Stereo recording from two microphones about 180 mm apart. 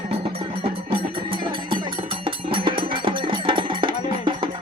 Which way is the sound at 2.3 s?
30° right (ahead or behind).